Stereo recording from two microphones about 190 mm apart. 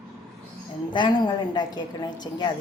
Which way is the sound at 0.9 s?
25° left (ahead or behind).